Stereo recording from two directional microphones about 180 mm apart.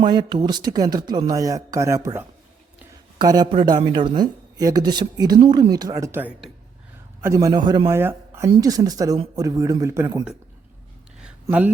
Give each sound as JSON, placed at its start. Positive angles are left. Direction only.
{"t": 0.0, "sound": "speech", "side_deg": -25}
{"t": 8.4, "sound": "speech", "side_deg": -25}
{"t": 11.4, "sound": "speech", "side_deg": -10}